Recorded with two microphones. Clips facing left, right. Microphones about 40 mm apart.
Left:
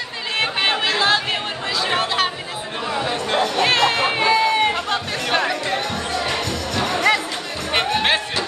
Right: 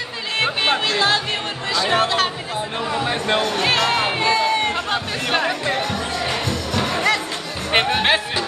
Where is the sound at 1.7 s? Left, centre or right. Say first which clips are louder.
Right 3 dB; centre.